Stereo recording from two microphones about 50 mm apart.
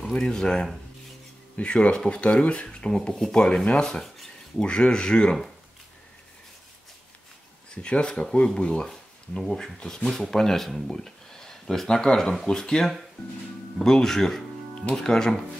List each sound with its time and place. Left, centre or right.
0.1 s speech: centre
2.9 s speech: centre
4.6 s speech: left
7.7 s speech: left